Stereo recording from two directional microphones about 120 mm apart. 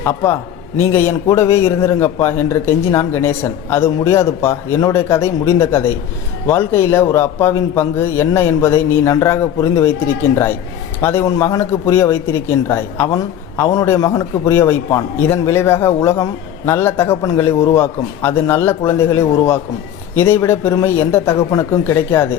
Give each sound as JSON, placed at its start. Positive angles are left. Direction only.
{"t": 0.0, "sound": "a man's voice", "side_deg": 20}